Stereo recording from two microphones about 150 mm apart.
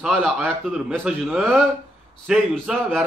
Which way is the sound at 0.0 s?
Centre (ahead or behind).